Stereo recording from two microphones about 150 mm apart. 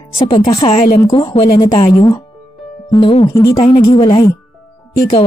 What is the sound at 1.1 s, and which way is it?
Speech, 35° left (ahead or behind).